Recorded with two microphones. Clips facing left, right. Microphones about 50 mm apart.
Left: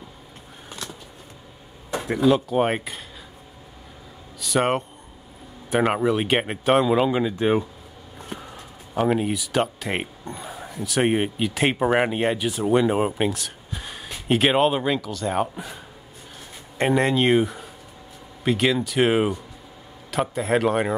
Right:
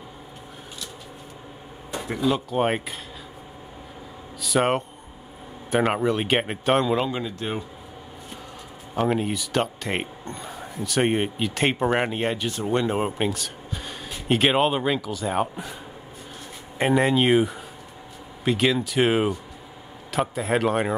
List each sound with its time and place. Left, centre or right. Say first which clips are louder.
2.2 s speech: left 3 dB; centre
4.4 s speech: even; centre
7.1 s speech: left 8 dB; centre
8.9 s speech: left 2 dB; centre